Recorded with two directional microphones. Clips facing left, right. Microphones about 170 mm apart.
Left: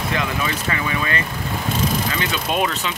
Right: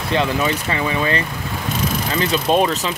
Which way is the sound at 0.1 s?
30° right (ahead or behind).